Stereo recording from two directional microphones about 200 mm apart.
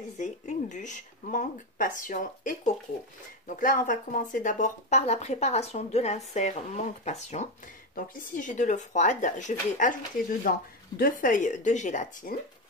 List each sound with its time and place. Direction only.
0.2 s speech: 40° left (ahead or behind)
11.0 s speech: 45° left (ahead or behind)